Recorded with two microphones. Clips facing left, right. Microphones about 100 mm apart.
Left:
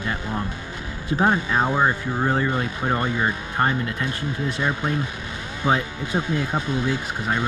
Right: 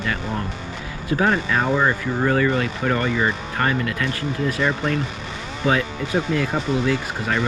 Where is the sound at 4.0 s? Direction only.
85° right.